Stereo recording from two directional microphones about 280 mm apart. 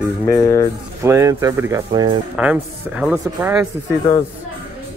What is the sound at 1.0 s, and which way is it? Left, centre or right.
Speech, centre.